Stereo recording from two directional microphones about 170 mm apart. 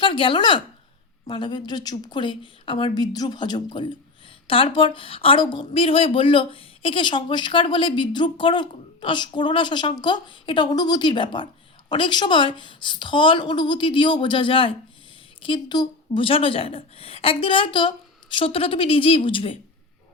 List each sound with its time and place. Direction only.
0.0 s a woman's voice: 30° left (ahead or behind)